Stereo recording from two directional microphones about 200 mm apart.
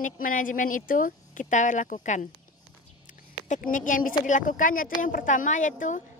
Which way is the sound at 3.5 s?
40° left (ahead or behind).